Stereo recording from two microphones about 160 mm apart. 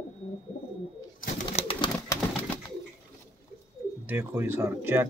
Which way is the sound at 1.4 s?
35° left (ahead or behind).